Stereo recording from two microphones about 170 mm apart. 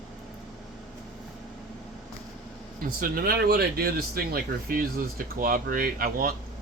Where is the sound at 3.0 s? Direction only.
60° right (ahead or behind).